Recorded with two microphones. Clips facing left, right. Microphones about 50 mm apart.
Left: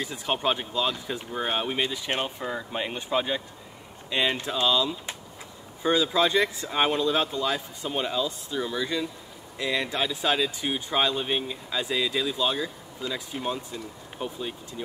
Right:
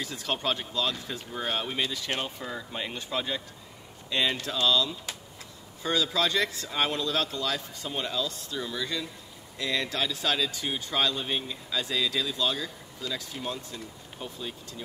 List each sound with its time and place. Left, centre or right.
0.0 s speech: centre